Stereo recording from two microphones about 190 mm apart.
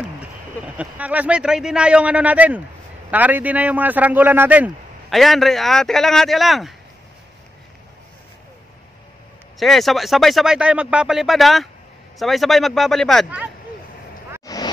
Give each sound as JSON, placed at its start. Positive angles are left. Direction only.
{"t": 0.7, "sound": "a man's voice", "side_deg": -10}
{"t": 9.6, "sound": "speech", "side_deg": 0}
{"t": 14.4, "sound": "vehicle", "side_deg": 20}